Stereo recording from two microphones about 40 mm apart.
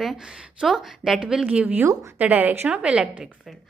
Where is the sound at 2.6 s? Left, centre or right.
Right.